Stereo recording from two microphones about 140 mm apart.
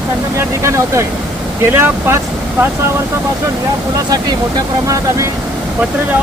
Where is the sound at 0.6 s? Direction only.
20° right (ahead or behind).